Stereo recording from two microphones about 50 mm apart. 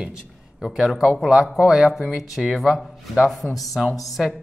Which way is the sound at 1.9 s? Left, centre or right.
Centre.